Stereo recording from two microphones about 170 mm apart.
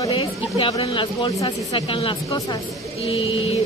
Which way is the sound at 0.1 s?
30° left (ahead or behind).